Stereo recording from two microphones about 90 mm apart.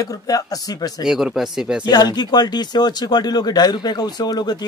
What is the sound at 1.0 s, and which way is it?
Speech, 5° right (ahead or behind).